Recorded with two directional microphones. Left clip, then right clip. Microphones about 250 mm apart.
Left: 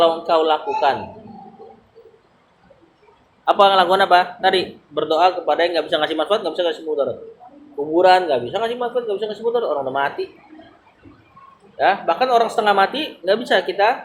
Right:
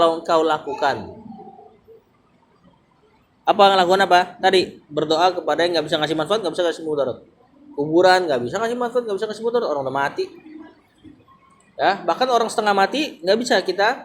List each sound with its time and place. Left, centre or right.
0.3 s speech: right
3.4 s speech: right
11.8 s speech: right